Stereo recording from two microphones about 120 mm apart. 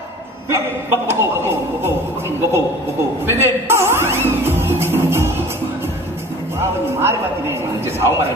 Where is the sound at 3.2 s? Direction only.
20° right (ahead or behind).